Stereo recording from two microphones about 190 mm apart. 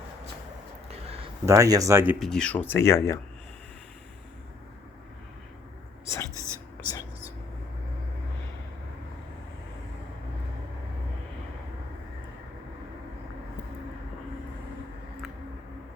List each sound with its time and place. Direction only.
0.9 s a sound: 30° right (ahead or behind)
1.5 s speech: 15° right (ahead or behind)
2.1 s speech: centre (ahead or behind)
6.1 s whispering: 15° left (ahead or behind)
6.3 s whispering: 15° right (ahead or behind)